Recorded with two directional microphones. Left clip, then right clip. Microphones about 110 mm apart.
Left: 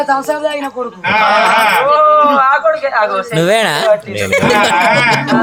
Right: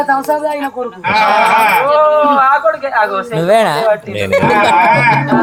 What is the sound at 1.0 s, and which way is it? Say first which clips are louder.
Speech: even; 5° right (ahead or behind).